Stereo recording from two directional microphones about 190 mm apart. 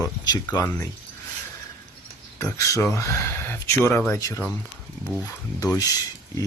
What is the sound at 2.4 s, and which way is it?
Speech, 15° left (ahead or behind).